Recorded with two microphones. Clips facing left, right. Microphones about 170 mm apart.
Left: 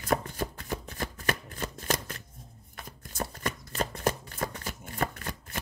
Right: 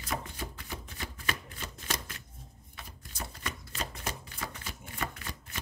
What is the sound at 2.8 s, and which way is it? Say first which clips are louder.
Chopping: left 7 dB; 50° left (ahead or behind).